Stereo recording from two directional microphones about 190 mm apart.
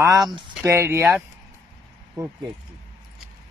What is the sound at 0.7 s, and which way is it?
Speech, 15° right (ahead or behind).